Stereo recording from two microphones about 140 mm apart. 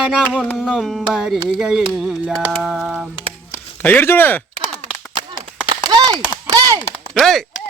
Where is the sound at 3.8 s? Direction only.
15° left (ahead or behind).